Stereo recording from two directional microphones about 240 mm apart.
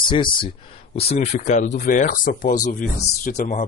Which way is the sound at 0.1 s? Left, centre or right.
Centre.